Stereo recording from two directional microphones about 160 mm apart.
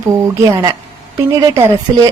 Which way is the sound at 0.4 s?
25° right (ahead or behind).